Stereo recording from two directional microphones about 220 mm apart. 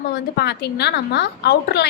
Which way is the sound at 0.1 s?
50° left (ahead or behind).